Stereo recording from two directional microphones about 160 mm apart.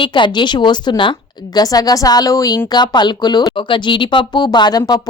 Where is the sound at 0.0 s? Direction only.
30° left (ahead or behind).